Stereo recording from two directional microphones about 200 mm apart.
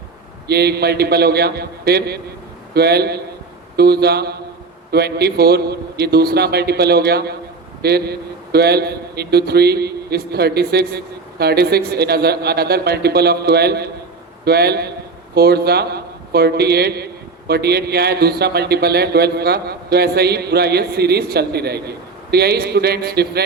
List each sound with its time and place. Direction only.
0.4 s a man's voice: 55° right (ahead or behind)